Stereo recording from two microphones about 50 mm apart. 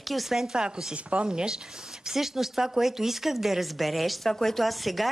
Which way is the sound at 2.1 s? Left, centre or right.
Centre.